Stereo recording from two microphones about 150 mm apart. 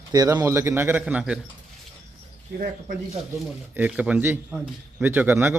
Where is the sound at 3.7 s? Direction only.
10° right (ahead or behind).